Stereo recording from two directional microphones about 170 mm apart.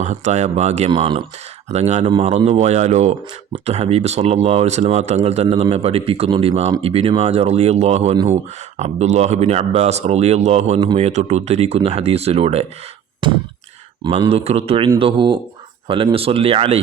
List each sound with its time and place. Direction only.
0.0 s speech: 40° right (ahead or behind)
0.9 s speech: 30° right (ahead or behind)
13.2 s a sound: 30° right (ahead or behind)
14.0 s speech: 35° right (ahead or behind)